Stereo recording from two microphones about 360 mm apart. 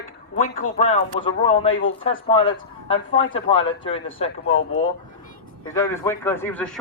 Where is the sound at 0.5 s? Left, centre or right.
Centre.